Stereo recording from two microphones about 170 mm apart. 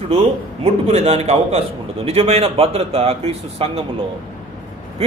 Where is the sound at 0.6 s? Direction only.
40° right (ahead or behind).